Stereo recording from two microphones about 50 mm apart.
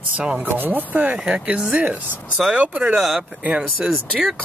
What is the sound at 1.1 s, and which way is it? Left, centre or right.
Speech, right.